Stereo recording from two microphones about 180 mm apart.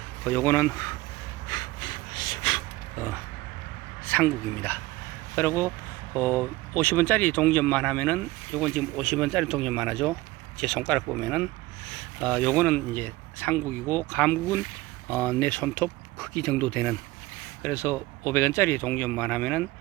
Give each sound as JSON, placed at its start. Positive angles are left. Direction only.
{"t": 0.3, "sound": "speech", "side_deg": 10}
{"t": 1.5, "sound": "a sound", "side_deg": 25}
{"t": 4.0, "sound": "speech", "side_deg": 10}